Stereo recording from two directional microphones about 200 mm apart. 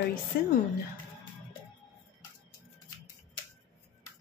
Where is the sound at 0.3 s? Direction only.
50° left (ahead or behind).